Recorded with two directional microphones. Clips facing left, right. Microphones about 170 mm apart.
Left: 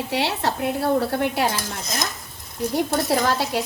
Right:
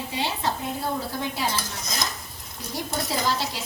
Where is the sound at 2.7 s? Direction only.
60° left (ahead or behind).